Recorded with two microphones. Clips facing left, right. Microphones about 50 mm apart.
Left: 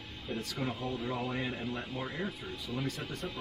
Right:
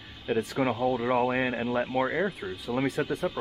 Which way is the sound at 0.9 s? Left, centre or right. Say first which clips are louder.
Right 10 dB; right.